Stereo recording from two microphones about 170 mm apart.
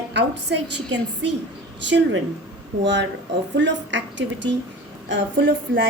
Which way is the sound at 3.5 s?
90° right.